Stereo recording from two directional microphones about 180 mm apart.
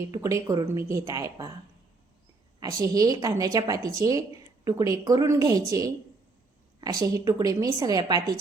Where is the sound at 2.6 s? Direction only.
20° right (ahead or behind).